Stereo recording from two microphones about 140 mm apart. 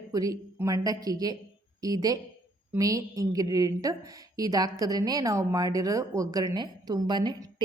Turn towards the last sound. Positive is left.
turn(degrees=-30)  # may be behind; listen again after turning